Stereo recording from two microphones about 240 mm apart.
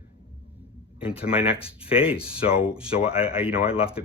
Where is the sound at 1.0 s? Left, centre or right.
Centre.